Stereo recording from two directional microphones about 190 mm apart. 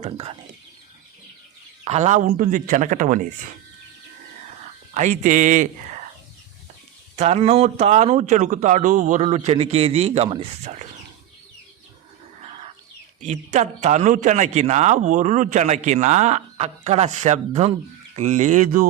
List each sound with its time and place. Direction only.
0.0 s speech: 30° right (ahead or behind)
1.8 s a man's voice: 35° right (ahead or behind)
4.9 s speech: 40° right (ahead or behind)
7.2 s a man's voice: 35° right (ahead or behind)
13.2 s a man's voice: 40° right (ahead or behind)